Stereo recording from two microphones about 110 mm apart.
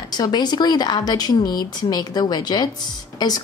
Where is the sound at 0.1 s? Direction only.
40° left (ahead or behind).